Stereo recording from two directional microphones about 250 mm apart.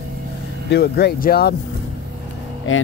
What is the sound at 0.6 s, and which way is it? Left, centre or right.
Speech, left.